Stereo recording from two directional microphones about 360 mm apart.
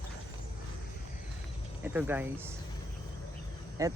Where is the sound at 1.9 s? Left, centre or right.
Centre.